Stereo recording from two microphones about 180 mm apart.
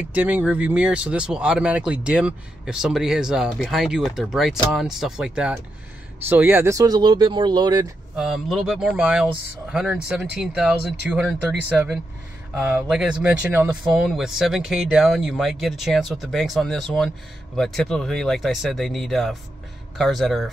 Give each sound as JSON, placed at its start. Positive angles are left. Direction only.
{"t": 0.1, "sound": "speech", "side_deg": -10}
{"t": 8.2, "sound": "speech", "side_deg": -5}